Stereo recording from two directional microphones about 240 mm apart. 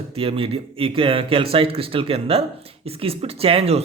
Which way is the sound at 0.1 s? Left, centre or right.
Right.